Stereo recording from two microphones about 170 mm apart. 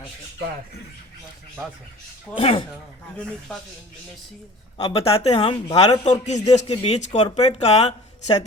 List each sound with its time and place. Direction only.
2.3 s speech: 35° left (ahead or behind)
4.8 s speech: 30° left (ahead or behind)